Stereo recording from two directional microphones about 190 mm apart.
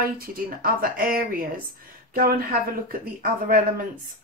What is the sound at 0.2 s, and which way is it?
Speech, 50° right (ahead or behind).